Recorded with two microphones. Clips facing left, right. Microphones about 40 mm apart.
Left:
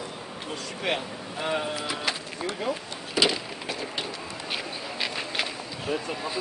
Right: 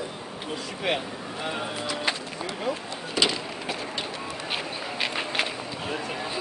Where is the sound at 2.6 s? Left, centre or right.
Centre.